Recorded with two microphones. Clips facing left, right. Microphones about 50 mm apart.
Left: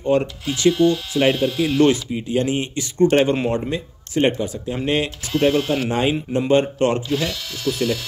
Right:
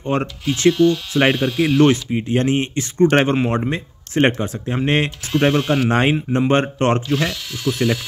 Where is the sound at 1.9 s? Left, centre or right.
Right.